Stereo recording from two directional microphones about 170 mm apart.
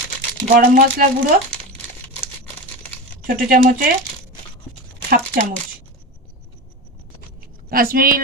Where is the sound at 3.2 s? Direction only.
55° right (ahead or behind).